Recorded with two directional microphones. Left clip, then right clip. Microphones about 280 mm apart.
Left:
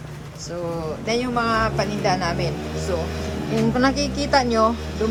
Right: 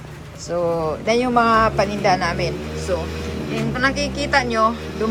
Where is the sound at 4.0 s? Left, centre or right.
Left.